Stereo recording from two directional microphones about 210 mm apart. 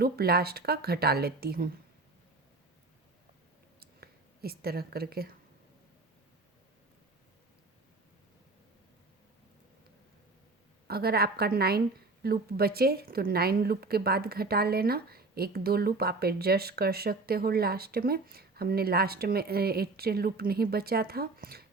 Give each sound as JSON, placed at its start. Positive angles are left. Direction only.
{"t": 0.0, "sound": "a woman's voice", "side_deg": -50}
{"t": 3.8, "sound": "a sound", "side_deg": -45}
{"t": 10.8, "sound": "a woman's voice", "side_deg": -45}